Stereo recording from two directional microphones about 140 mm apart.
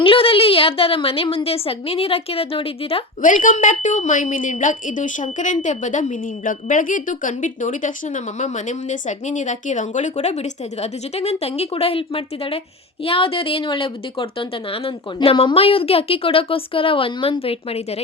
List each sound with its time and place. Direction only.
0.0 s a woman's voice: 40° left (ahead or behind)
3.2 s a woman's voice: 70° left (ahead or behind); by 18.0 s 45° left (ahead or behind)